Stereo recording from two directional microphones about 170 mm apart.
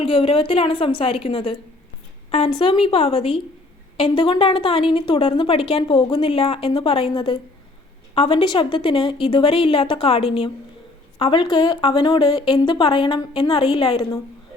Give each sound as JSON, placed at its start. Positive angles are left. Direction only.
{"t": 0.0, "sound": "a woman's voice", "side_deg": 30}